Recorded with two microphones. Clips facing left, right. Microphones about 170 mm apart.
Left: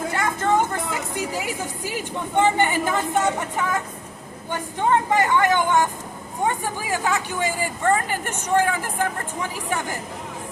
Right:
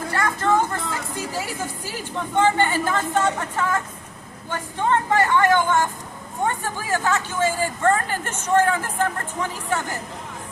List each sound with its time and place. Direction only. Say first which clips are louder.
0.1 s speech: right 2 dB; 15° left (ahead or behind)
4.8 s speech: even; 15° left (ahead or behind)